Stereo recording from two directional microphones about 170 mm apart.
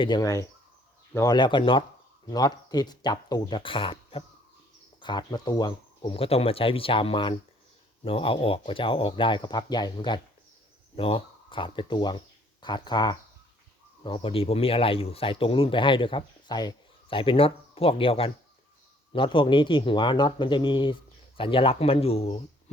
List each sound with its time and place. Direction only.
0.0 s speech: 25° left (ahead or behind)